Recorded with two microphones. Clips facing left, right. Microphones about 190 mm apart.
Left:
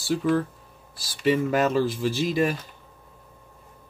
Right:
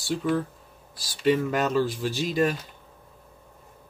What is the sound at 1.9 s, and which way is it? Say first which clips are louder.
Speech: left 3 dB; 50° left (ahead or behind).